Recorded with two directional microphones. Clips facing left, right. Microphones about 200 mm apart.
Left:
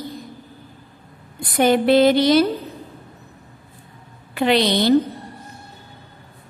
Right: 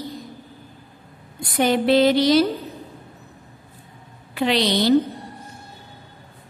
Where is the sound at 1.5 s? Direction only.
50° left (ahead or behind).